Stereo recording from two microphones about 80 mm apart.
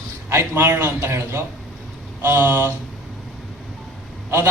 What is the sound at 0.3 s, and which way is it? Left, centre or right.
A man's voice, right.